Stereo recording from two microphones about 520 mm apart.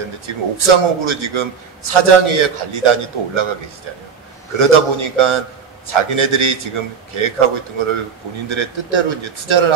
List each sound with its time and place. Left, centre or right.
0.3 s a man's voice: right
4.6 s a man's voice: right